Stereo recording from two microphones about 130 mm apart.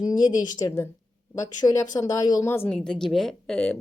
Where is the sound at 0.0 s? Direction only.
30° left (ahead or behind).